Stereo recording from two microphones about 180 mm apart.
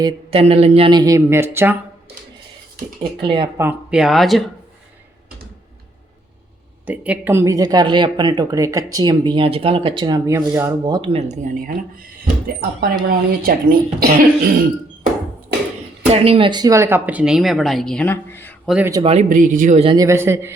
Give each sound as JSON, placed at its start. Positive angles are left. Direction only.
{"t": 0.0, "sound": "speech", "side_deg": -35}
{"t": 3.0, "sound": "speech", "side_deg": -25}
{"t": 3.6, "sound": "speech", "side_deg": -10}
{"t": 6.8, "sound": "speech", "side_deg": -10}
{"t": 16.2, "sound": "speech", "side_deg": -30}
{"t": 18.6, "sound": "speech", "side_deg": -5}
{"t": 19.0, "sound": "speech", "side_deg": -40}
{"t": 19.8, "sound": "speech", "side_deg": -30}
{"t": 20.1, "sound": "a man's voice", "side_deg": -15}